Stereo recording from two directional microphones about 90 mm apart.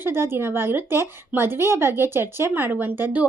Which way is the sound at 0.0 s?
25° right (ahead or behind).